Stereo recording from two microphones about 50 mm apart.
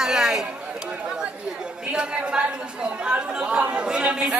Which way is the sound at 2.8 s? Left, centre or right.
Centre.